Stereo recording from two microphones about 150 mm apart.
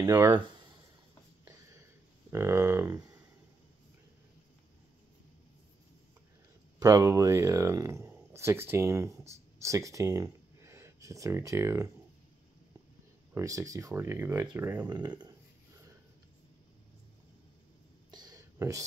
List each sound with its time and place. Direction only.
0.0 s speech: 15° right (ahead or behind)
1.4 s a sound: 20° right (ahead or behind)
2.3 s speech: 20° right (ahead or behind)
6.8 s speech: 20° right (ahead or behind)
13.3 s speech: 20° right (ahead or behind)
14.9 s speech: 30° right (ahead or behind)
18.1 s a sound: 25° right (ahead or behind)